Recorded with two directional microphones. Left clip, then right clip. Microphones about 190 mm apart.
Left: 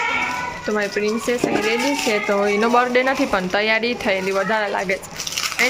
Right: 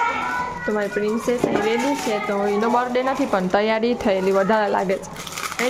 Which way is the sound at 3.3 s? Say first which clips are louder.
Left 1 dB; 20° right (ahead or behind).